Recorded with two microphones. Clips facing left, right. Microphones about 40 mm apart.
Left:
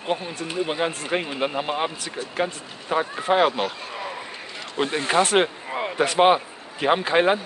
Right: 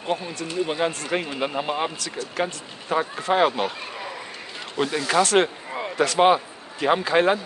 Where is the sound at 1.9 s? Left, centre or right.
Left.